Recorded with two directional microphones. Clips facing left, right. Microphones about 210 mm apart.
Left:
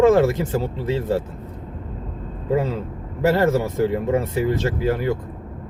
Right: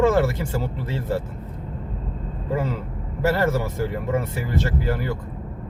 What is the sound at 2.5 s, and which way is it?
Speech, 20° left (ahead or behind).